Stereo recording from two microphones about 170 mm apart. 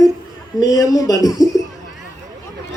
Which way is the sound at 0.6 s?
20° left (ahead or behind).